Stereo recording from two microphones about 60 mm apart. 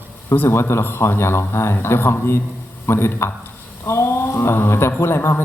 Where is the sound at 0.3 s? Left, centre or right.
Left.